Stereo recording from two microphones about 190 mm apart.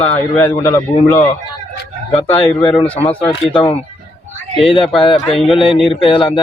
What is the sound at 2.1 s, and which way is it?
Speech, 30° left (ahead or behind).